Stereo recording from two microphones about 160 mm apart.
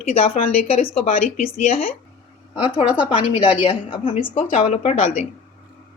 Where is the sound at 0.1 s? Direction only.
40° left (ahead or behind).